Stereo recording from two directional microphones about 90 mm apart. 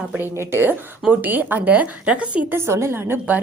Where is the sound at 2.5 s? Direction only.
30° right (ahead or behind).